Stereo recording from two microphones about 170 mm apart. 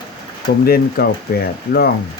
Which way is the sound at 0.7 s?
65° left (ahead or behind).